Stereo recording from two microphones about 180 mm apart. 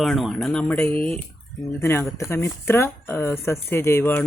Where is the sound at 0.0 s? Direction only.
Centre (ahead or behind).